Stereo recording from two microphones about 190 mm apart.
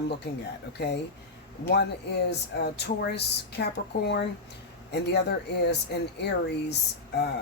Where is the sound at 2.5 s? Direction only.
60° left (ahead or behind).